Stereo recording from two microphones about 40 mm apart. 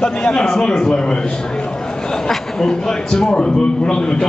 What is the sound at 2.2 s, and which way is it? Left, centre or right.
A man's voice, centre.